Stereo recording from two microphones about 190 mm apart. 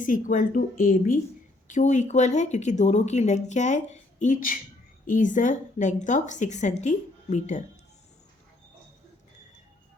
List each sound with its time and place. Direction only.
0.0 s speech: 45° left (ahead or behind)